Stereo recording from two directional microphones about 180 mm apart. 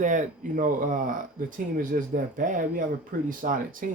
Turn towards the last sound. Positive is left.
turn(degrees=-50)  # may be behind; listen again after turning